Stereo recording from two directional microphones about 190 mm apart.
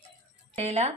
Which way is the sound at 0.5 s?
35° right (ahead or behind).